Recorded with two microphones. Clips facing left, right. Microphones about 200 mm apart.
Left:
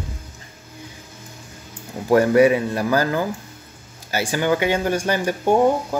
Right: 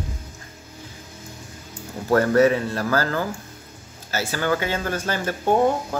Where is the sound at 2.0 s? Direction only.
15° left (ahead or behind).